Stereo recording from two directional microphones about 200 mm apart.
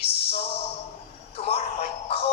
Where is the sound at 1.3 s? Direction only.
30° left (ahead or behind).